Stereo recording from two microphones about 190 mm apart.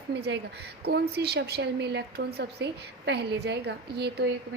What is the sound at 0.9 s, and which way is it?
A woman's voice, 60° right (ahead or behind).